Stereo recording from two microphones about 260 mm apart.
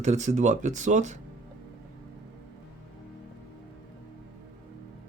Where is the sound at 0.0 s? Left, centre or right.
Right.